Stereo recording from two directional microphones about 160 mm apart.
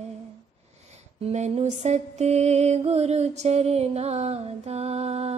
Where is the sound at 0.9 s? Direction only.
45° right (ahead or behind).